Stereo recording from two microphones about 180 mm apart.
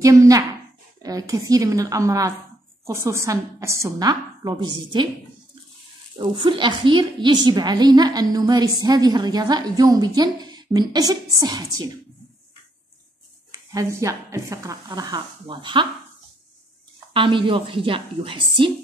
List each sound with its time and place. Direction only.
0.0 s a woman's voice: 15° right (ahead or behind)
6.1 s a woman's voice: 25° right (ahead or behind)
13.5 s a woman's voice: 20° right (ahead or behind)
17.1 s a woman's voice: 30° right (ahead or behind)